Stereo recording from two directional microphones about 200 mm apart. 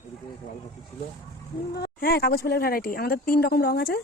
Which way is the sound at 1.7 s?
50° left (ahead or behind).